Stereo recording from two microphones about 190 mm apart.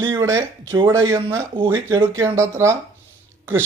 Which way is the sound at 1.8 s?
15° right (ahead or behind).